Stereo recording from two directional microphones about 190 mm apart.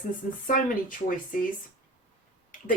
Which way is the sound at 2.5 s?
45° left (ahead or behind).